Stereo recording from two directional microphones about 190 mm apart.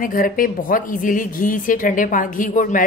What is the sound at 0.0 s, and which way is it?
Speech, 45° left (ahead or behind).